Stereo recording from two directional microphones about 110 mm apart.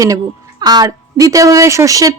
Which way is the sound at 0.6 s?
35° right (ahead or behind).